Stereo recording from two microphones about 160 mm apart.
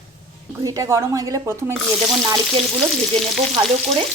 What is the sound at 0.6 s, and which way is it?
Speech, 20° right (ahead or behind).